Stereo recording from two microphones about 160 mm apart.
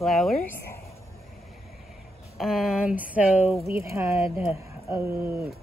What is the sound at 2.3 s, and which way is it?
Speech, centre (ahead or behind).